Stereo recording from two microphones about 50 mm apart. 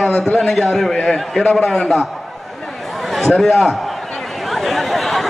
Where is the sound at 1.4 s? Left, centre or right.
Left.